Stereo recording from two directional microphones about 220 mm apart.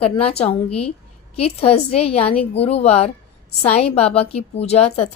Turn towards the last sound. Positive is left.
turn(degrees=30)  # may be behind; listen again after turning